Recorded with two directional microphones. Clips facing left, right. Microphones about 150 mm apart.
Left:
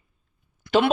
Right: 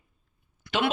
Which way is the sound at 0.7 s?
30° left (ahead or behind).